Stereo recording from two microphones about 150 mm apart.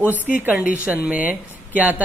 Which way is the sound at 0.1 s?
10° right (ahead or behind).